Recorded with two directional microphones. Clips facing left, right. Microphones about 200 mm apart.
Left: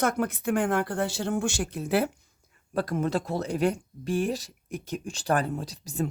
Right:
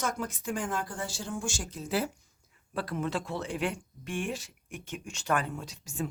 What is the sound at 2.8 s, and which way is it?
Speech, 45° left (ahead or behind).